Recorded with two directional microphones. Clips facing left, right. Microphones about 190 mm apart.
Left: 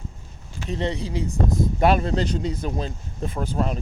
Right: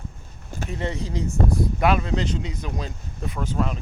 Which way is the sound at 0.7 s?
20° left (ahead or behind).